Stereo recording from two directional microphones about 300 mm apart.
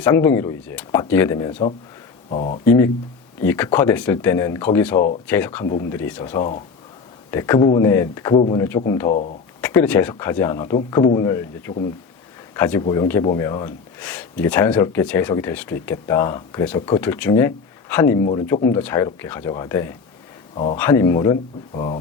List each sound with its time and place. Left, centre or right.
0.0 s speech: centre
2.3 s speech: left
2.6 s speech: centre
9.0 s speech: left
9.6 s speech: centre